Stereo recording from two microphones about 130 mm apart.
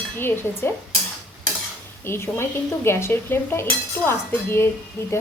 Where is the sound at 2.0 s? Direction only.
20° left (ahead or behind).